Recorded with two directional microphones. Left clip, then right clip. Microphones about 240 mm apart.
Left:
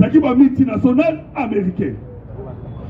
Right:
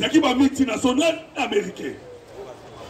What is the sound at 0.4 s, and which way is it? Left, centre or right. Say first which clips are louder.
A man's voice: left 6 dB; right.